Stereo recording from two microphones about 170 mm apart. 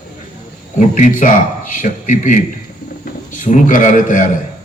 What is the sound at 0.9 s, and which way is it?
A man's voice, 50° left (ahead or behind).